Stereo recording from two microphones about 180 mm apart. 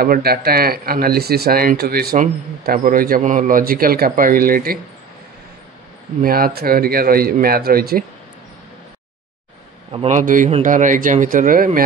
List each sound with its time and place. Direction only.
0.0 s speech: 60° right (ahead or behind)
6.2 s speech: 55° right (ahead or behind)
9.9 s speech: 40° right (ahead or behind)